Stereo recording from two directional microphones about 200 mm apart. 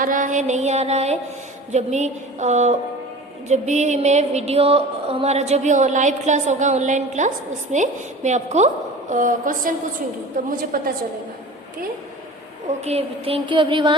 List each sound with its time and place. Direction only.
0.0 s music: 40° right (ahead or behind)
10.6 s a woman's voice: 45° right (ahead or behind)
12.8 s a sound: 30° right (ahead or behind)